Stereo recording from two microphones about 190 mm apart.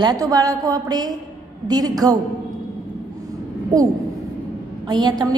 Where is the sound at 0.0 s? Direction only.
20° right (ahead or behind).